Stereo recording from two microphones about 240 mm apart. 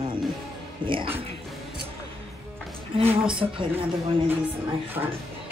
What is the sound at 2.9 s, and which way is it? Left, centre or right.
Speech, right.